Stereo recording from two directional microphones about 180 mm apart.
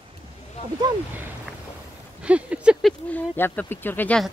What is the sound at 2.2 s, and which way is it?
Speech, 5° right (ahead or behind).